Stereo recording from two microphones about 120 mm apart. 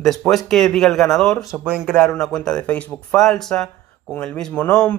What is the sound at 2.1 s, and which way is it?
Speech, 10° left (ahead or behind).